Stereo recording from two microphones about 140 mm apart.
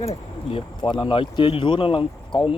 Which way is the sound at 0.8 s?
35° left (ahead or behind).